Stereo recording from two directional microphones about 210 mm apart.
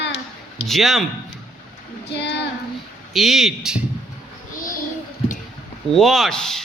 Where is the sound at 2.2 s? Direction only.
55° left (ahead or behind).